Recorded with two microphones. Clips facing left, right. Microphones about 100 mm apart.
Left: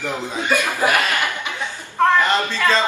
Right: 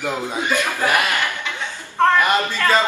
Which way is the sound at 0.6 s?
15° left (ahead or behind).